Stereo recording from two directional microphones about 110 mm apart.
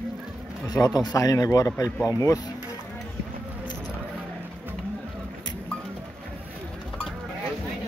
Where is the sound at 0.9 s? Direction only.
35° left (ahead or behind).